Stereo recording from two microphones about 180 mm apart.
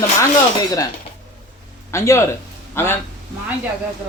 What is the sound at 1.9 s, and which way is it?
Speech, 15° left (ahead or behind).